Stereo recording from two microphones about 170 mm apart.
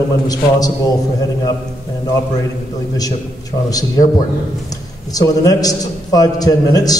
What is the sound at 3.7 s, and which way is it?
Speech, 20° left (ahead or behind).